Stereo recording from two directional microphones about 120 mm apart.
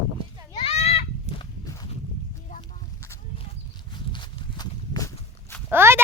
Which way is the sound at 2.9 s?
25° left (ahead or behind).